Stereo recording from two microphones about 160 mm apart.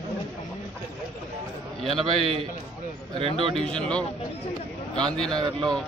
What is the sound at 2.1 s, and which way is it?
Speech, 35° right (ahead or behind).